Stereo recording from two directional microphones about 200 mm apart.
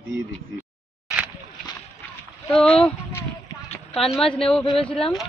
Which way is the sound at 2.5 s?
5° left (ahead or behind).